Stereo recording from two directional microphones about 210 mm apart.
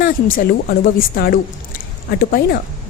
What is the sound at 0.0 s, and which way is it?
A woman's voice, 45° left (ahead or behind).